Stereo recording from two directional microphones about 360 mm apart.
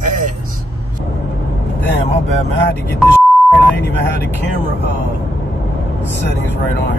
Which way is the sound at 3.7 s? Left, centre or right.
Left.